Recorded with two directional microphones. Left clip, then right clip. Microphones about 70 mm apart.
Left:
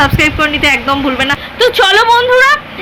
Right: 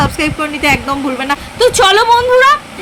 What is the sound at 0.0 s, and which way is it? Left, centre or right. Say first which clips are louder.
Speech: left 5 dB; right.